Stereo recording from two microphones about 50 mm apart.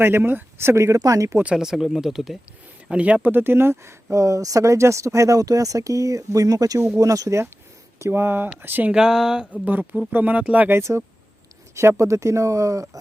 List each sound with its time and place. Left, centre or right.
0.0 s speech: right
0.7 s speech: right
1.5 s speech: centre
2.9 s speech: right
3.3 s speech: right
4.1 s speech: right
6.7 s speech: right
7.0 s speech: right
8.1 s speech: right
8.9 s speech: centre
10.1 s speech: right
10.4 s speech: right
10.9 s speech: right
11.7 s speech: right